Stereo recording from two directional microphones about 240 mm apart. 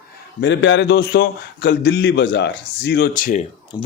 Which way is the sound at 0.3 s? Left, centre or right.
Left.